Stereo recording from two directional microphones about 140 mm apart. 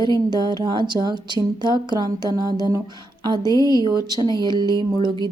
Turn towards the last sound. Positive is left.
turn(degrees=-30)  # may be behind; listen again after turning